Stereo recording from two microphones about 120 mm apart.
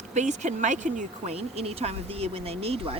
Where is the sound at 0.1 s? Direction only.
80° right.